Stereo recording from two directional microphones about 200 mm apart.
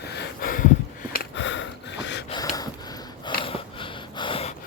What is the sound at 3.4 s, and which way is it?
Snort, 25° left (ahead or behind).